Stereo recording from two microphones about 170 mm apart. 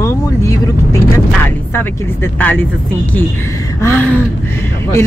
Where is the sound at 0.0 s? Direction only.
15° left (ahead or behind).